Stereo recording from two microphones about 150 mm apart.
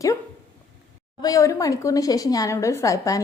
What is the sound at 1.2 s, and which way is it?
A woman's voice, 25° left (ahead or behind).